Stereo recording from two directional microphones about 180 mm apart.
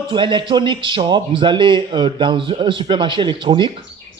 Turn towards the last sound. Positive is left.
turn(degrees=-25)  # may be behind; listen again after turning